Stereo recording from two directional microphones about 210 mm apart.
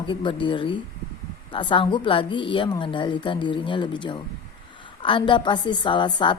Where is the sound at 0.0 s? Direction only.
25° left (ahead or behind).